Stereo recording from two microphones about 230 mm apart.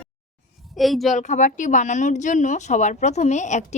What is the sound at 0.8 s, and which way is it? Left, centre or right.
Speech, centre.